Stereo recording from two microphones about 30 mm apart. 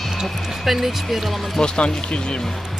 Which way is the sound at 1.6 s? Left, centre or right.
Left.